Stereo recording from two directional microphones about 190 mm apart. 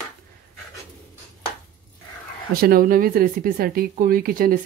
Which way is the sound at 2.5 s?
50° right (ahead or behind).